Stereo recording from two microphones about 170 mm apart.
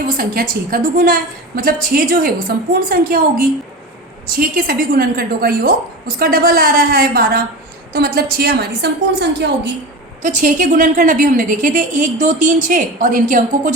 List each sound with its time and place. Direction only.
0.2 s a woman's voice: 60° right (ahead or behind); by 9.7 s 80° right
10.2 s a woman's voice: 50° right (ahead or behind)